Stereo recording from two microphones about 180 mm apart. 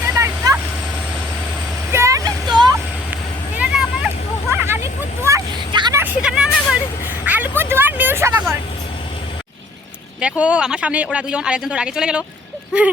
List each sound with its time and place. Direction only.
0.0 s vehicle: 15° right (ahead or behind)
1.9 s vehicle: 15° right (ahead or behind)
3.6 s vehicle: 5° right (ahead or behind)
4.6 s hubbub: 15° right (ahead or behind)
6.0 s vehicle: 5° right (ahead or behind)
7.3 s a sound: 10° right (ahead or behind)
10.2 s speech: 5° right (ahead or behind)